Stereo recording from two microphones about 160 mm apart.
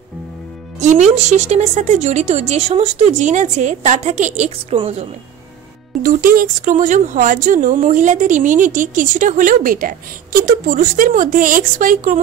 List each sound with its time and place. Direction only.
0.7 s a woman's voice: 45° right (ahead or behind)
6.0 s speech: 60° right (ahead or behind)